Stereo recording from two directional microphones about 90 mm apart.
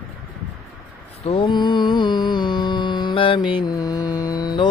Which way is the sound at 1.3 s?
65° left (ahead or behind).